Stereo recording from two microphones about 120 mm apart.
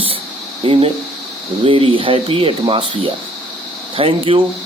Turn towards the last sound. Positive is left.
turn(degrees=-50)  # may be behind; listen again after turning